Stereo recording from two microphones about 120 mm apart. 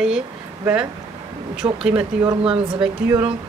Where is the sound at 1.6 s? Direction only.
35° right (ahead or behind).